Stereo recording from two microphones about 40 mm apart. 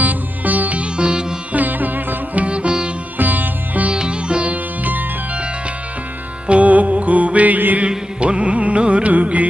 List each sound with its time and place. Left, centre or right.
0.0 s music: right
0.9 s music: right
1.5 s sitar: right
2.3 s sitar: right
3.2 s sitar: right
3.9 s music: right
4.5 s music: right
6.5 s music: right
7.9 s carnatic music: right